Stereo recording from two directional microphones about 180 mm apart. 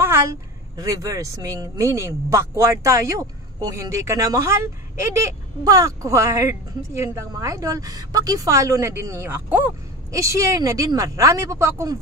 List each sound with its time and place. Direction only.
0.0 s speech: 15° right (ahead or behind)